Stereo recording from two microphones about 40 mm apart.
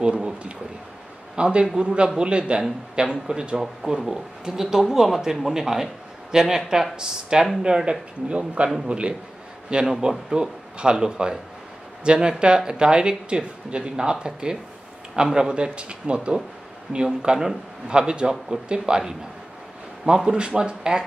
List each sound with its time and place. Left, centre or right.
0.0 s a sound: right
1.3 s a man's voice: right
9.8 s speech: centre